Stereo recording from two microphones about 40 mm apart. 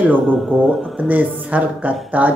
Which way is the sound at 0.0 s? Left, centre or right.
Right.